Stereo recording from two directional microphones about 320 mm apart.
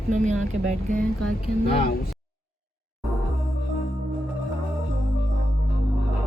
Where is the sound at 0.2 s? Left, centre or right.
Right.